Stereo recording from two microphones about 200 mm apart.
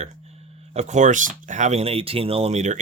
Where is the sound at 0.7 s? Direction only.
35° right (ahead or behind).